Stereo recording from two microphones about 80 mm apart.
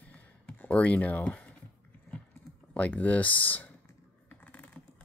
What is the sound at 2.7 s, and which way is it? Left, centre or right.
Speech, centre.